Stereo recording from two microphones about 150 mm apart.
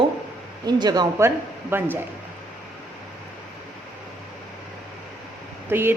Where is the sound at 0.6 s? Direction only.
25° right (ahead or behind).